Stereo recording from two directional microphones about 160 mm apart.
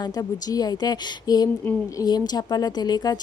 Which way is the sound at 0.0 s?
25° left (ahead or behind).